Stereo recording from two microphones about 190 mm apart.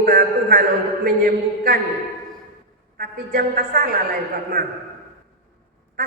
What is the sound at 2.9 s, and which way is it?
A woman's voice, 50° right (ahead or behind).